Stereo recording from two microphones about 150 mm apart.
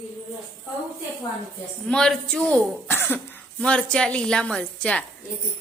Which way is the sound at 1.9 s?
5° left (ahead or behind).